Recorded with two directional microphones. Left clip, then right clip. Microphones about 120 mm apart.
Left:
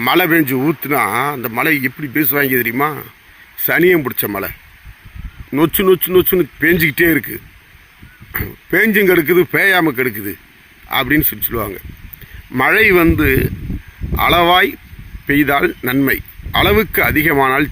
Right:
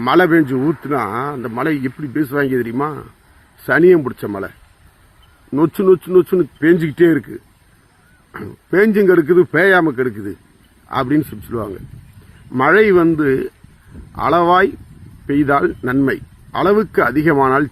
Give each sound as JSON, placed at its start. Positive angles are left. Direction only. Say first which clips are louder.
{"t": 0.0, "sound": "speech", "louder": "right 1 dB", "side_deg": 15}
{"t": 0.3, "sound": "speech", "louder": "left 1 dB", "side_deg": 35}
{"t": 1.8, "sound": "speech", "louder": "left 3 dB", "side_deg": 45}
{"t": 3.7, "sound": "speech", "louder": "right 1 dB", "side_deg": 20}
{"t": 4.0, "sound": "speech", "louder": "left 2 dB", "side_deg": 30}
{"t": 5.5, "sound": "speech", "louder": "even", "side_deg": 25}
{"t": 8.8, "sound": "speech", "louder": "even", "side_deg": 20}
{"t": 9.0, "sound": "speech", "louder": "even", "side_deg": 30}
{"t": 10.1, "sound": "speech", "louder": "left 2 dB", "side_deg": 55}
{"t": 10.9, "sound": "speech", "louder": "left 2 dB", "side_deg": 20}
{"t": 16.5, "sound": "speech", "louder": "left 2 dB", "side_deg": 20}